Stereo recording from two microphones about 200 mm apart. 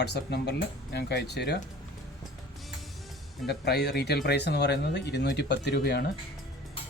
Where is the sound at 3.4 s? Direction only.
55° left (ahead or behind).